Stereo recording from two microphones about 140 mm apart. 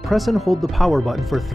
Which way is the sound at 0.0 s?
Centre (ahead or behind).